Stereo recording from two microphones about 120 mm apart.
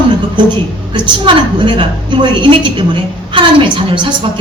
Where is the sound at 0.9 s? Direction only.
45° right (ahead or behind).